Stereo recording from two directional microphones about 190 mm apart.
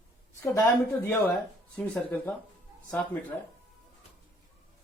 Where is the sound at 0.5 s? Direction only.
10° left (ahead or behind).